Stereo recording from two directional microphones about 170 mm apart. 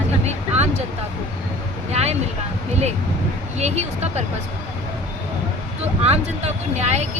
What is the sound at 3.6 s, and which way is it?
Speech, 40° right (ahead or behind).